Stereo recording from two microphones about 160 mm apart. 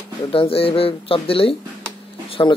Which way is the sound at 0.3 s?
35° left (ahead or behind).